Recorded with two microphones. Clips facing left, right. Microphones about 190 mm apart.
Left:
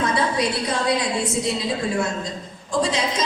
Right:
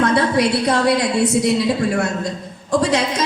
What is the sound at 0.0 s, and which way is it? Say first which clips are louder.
A man's voice: right 6 dB; 65° right (ahead or behind).